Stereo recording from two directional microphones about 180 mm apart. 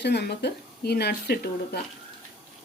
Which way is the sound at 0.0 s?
70° left (ahead or behind).